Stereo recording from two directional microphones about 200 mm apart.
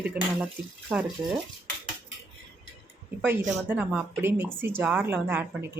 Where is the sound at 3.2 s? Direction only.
10° right (ahead or behind).